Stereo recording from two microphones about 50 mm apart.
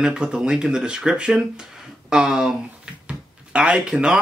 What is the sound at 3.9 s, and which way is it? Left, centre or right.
Speech, centre.